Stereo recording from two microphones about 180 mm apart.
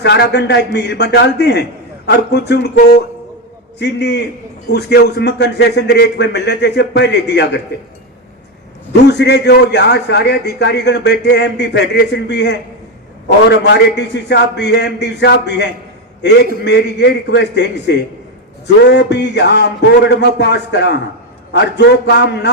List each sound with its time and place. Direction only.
0.0 s a man's voice: 70° left (ahead or behind)
3.8 s a man's voice: 70° left (ahead or behind)
8.9 s a man's voice: 70° left (ahead or behind)